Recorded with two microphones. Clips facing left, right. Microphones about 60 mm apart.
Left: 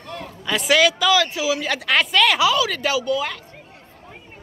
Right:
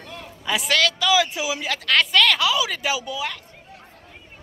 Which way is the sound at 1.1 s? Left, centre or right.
Centre.